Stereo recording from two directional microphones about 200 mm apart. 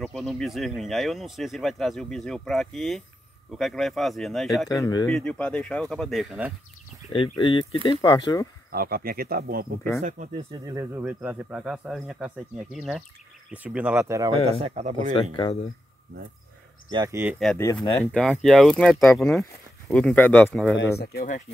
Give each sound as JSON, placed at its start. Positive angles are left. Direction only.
{"t": 0.0, "sound": "speech", "side_deg": 0}
{"t": 4.6, "sound": "speech", "side_deg": 15}
{"t": 5.0, "sound": "speech", "side_deg": 5}
{"t": 7.1, "sound": "speech", "side_deg": 25}
{"t": 8.7, "sound": "speech", "side_deg": -50}
{"t": 10.0, "sound": "speech", "side_deg": -35}
{"t": 10.5, "sound": "speech", "side_deg": -15}
{"t": 14.6, "sound": "speech", "side_deg": -35}
{"t": 16.9, "sound": "speech", "side_deg": -15}
{"t": 17.6, "sound": "speech", "side_deg": 15}
{"t": 21.0, "sound": "speech", "side_deg": 50}